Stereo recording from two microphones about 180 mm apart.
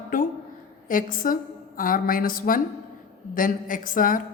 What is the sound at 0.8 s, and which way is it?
A woman's voice, 50° left (ahead or behind).